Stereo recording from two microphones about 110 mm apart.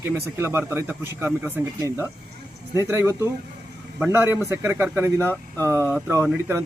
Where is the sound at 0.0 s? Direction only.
20° right (ahead or behind).